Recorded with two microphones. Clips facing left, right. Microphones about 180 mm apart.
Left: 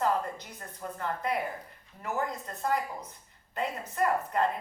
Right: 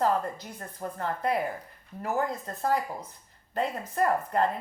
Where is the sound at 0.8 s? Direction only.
35° right (ahead or behind).